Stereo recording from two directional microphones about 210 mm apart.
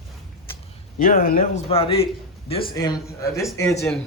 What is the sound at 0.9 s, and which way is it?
Speech, 40° left (ahead or behind).